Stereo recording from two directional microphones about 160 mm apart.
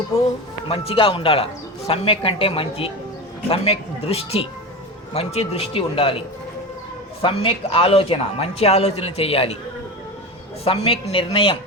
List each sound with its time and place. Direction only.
0.7 s speech: 35° left (ahead or behind)
10.6 s speech: 40° left (ahead or behind)